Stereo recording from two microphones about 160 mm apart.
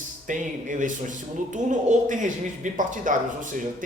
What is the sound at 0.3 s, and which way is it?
Speech, 55° right (ahead or behind).